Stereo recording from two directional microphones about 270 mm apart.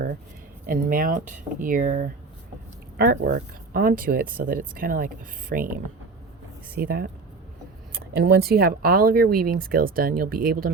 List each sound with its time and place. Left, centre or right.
0.7 s speech: right
6.7 s speech: right
8.1 s speech: right